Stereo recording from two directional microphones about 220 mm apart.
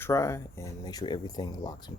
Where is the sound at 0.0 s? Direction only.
15° left (ahead or behind).